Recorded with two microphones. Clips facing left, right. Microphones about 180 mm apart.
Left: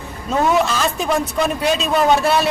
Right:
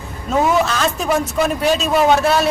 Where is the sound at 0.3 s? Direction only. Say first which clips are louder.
Right 1 dB; centre (ahead or behind).